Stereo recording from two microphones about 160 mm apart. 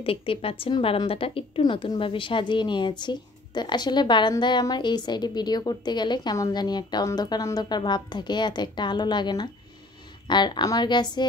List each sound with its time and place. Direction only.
0.0 s a woman's voice: 35° left (ahead or behind)